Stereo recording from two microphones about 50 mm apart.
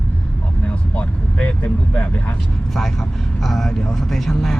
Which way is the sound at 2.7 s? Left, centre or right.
Centre.